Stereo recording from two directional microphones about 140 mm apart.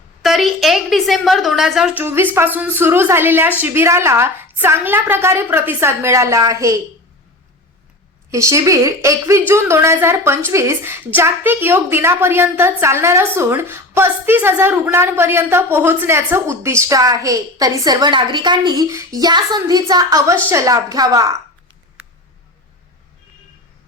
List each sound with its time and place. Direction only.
0.2 s a woman's voice: centre (ahead or behind)
2.0 s a woman's voice: 15° right (ahead or behind)
8.3 s a woman's voice: 20° right (ahead or behind)